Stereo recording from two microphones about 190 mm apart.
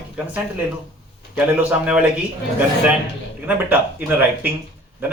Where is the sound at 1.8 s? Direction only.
5° right (ahead or behind).